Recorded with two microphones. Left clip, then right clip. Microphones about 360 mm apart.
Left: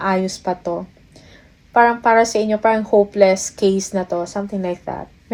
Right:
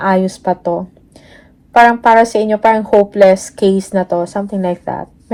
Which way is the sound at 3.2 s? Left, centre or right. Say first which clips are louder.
Right 6 dB; centre.